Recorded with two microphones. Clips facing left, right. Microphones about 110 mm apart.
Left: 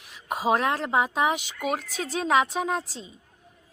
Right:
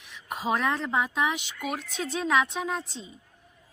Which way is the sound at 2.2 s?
30° left (ahead or behind).